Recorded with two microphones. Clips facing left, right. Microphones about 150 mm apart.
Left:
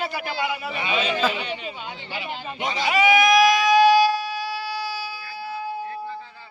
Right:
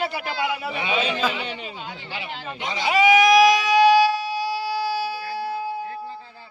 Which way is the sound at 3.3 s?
15° right (ahead or behind).